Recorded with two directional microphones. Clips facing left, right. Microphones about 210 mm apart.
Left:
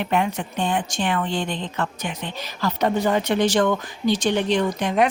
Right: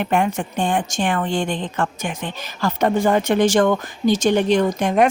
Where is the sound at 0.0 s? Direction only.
50° right (ahead or behind).